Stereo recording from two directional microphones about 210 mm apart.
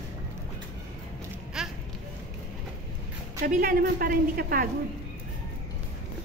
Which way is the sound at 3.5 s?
45° right (ahead or behind).